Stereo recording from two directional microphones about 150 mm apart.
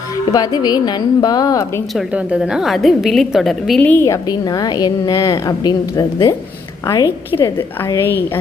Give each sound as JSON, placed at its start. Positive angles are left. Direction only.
{"t": 0.3, "sound": "a woman's voice", "side_deg": 25}
{"t": 2.0, "sound": "a woman's voice", "side_deg": -5}
{"t": 4.0, "sound": "a woman's voice", "side_deg": 25}